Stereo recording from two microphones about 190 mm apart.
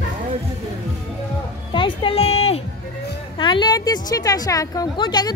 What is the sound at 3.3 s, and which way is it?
A woman's voice, 25° left (ahead or behind).